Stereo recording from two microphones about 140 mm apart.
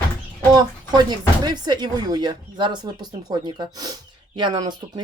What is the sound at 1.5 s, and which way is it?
Speech, 30° right (ahead or behind).